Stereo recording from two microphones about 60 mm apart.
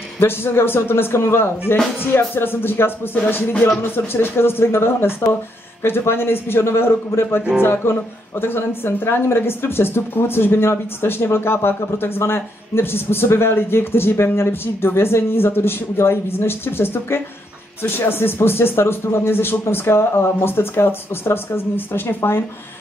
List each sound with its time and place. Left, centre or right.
0.2 s speech: left